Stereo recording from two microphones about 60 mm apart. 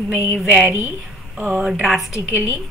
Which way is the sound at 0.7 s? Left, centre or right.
Right.